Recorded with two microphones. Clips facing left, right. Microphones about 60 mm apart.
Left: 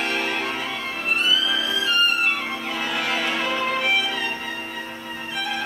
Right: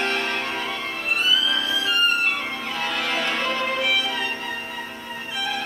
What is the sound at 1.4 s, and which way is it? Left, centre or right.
Music, centre.